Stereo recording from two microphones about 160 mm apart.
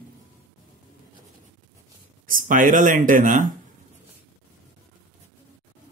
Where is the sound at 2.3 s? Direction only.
60° right (ahead or behind).